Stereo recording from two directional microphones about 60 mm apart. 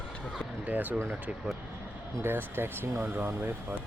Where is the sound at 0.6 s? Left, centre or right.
Right.